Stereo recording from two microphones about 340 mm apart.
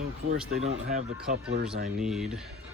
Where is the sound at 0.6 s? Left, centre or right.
Centre.